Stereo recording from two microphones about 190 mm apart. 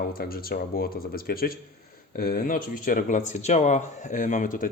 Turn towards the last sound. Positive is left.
turn(degrees=45)  # may be behind; listen again after turning